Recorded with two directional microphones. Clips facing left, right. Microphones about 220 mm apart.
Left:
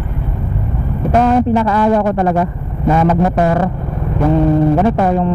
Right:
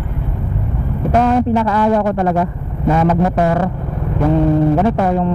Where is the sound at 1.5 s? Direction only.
15° left (ahead or behind).